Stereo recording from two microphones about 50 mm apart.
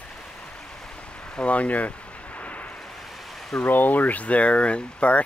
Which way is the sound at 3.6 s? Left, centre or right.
Left.